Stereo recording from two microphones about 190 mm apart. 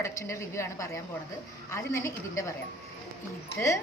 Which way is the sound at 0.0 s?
15° left (ahead or behind).